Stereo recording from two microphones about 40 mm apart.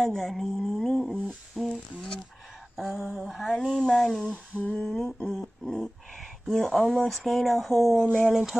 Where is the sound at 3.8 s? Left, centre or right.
Centre.